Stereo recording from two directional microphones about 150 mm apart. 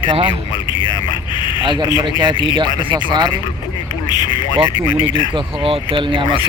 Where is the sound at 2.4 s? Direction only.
30° right (ahead or behind).